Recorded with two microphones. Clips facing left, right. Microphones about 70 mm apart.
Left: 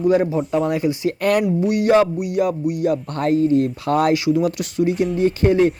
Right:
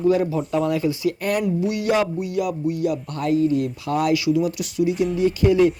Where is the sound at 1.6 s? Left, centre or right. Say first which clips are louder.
Left 5 dB; left.